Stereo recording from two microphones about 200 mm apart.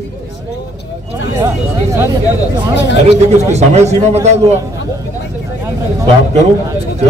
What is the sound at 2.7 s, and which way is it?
Speech, 60° left (ahead or behind).